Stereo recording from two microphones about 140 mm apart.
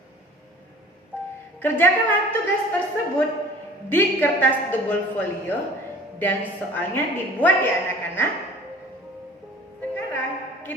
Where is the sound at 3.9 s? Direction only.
15° left (ahead or behind).